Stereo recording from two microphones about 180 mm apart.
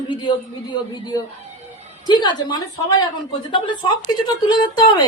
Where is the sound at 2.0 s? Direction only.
25° left (ahead or behind).